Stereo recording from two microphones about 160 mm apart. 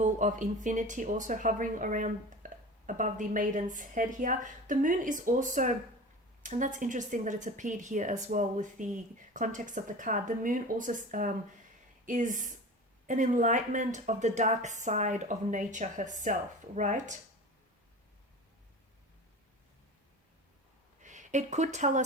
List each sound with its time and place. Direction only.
0.0 s speech: 50° right (ahead or behind)
21.0 s speech: 50° right (ahead or behind)